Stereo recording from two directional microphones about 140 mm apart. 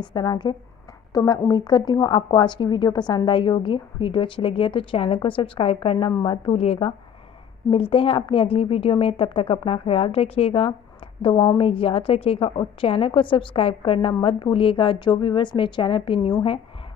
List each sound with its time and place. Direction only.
0.0 s a woman's voice: 30° left (ahead or behind)